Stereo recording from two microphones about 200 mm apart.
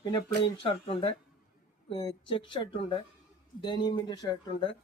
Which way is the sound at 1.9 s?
25° left (ahead or behind).